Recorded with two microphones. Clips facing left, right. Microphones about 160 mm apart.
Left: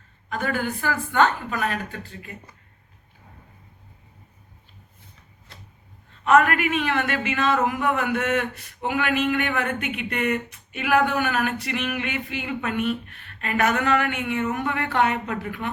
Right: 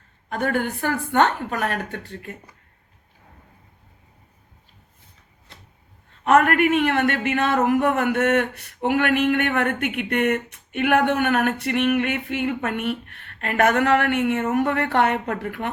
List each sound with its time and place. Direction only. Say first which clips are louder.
0.3 s speech: right 3 dB; 60° right (ahead or behind)
6.2 s speech: right 2 dB; 60° right (ahead or behind)
14.5 s speech: right 5 dB; 60° right (ahead or behind)